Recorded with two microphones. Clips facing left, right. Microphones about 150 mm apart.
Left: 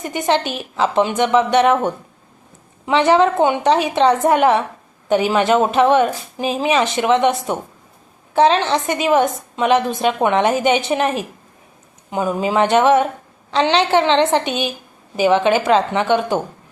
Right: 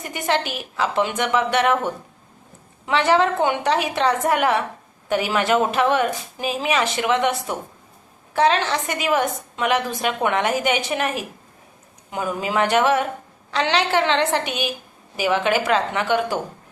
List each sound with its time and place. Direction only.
0.0 s a woman's voice: 25° left (ahead or behind)